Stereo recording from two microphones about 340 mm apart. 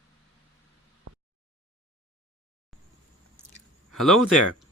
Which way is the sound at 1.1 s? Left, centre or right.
Right.